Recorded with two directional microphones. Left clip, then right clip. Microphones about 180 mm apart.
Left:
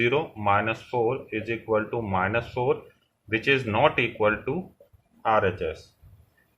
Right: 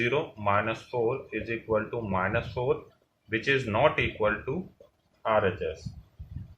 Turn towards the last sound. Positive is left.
turn(degrees=35)  # may be behind; listen again after turning